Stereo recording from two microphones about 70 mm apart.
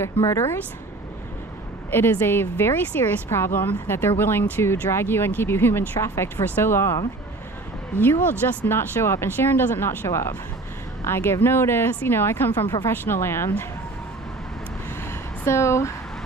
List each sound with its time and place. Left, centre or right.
0.0 s a woman's voice: left
1.9 s a woman's voice: left
8.0 s a woman's voice: left
15.4 s speech: left